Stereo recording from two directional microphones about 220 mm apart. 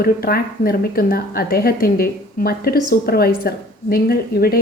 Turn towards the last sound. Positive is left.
turn(degrees=45)  # may be behind; listen again after turning